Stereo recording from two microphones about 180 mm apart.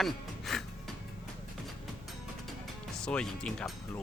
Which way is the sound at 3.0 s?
5° left (ahead or behind).